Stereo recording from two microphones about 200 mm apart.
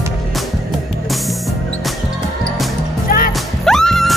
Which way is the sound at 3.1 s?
45° left (ahead or behind).